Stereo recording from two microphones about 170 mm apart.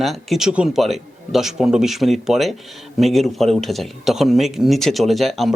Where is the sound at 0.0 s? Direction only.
Centre (ahead or behind).